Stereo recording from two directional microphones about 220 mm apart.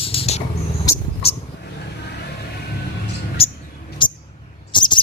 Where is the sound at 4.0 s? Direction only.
20° left (ahead or behind).